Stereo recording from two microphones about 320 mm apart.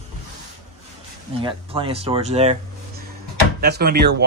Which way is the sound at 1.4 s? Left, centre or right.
Centre.